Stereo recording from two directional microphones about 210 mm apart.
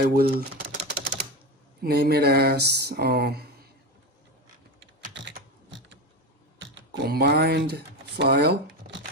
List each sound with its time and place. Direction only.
0.0 s speech: 50° right (ahead or behind)
5.1 s typing: 60° right (ahead or behind)
6.6 s speech: 60° right (ahead or behind)